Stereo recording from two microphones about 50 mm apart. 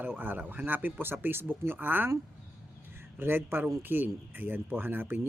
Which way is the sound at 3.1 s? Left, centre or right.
Right.